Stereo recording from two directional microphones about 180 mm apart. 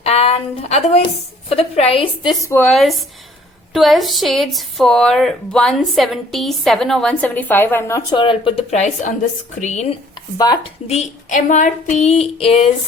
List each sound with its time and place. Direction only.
0.0 s a woman's voice: 35° left (ahead or behind)
1.5 s female singing: 35° left (ahead or behind)
2.4 s speech: 10° left (ahead or behind)
8.1 s female singing: 30° left (ahead or behind)
10.3 s speech: 20° left (ahead or behind)
10.8 s female singing: 40° left (ahead or behind)